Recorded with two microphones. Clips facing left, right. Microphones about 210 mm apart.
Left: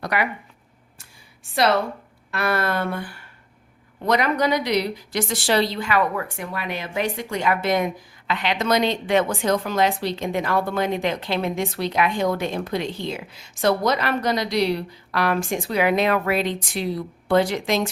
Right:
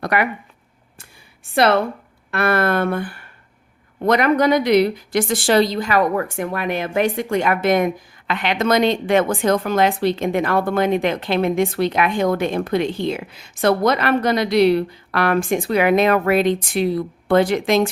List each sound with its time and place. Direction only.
0.0 s speech: 55° right (ahead or behind)
2.3 s a woman's voice: 55° right (ahead or behind)